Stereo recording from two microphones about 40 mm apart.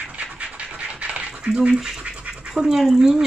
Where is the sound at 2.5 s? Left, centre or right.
Centre.